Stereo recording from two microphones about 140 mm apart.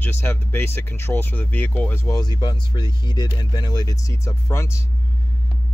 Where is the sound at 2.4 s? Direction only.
30° left (ahead or behind).